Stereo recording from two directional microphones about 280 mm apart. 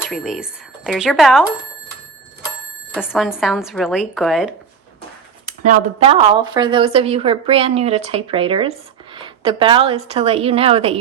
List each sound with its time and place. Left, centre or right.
0.0 s speech: centre
2.9 s speech: centre
5.5 s speech: right